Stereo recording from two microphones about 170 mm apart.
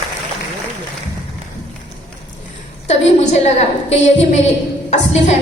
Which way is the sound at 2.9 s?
40° left (ahead or behind).